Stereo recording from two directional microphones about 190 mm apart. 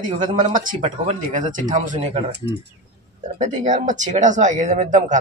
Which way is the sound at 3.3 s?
40° right (ahead or behind).